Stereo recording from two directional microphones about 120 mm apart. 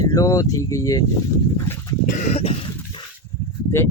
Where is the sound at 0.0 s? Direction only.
30° left (ahead or behind).